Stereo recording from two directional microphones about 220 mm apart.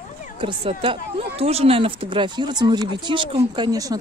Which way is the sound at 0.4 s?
25° right (ahead or behind).